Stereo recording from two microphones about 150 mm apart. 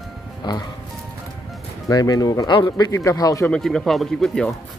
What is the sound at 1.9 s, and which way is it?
Speech, 25° left (ahead or behind).